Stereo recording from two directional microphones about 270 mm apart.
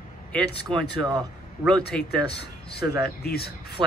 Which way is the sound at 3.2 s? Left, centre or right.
Left.